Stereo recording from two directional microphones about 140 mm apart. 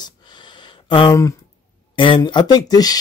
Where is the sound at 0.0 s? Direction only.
35° left (ahead or behind).